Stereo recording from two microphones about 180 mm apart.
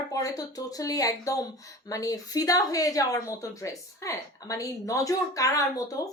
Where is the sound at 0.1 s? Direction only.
20° left (ahead or behind).